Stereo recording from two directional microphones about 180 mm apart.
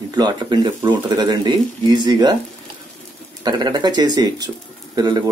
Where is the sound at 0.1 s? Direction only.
20° right (ahead or behind).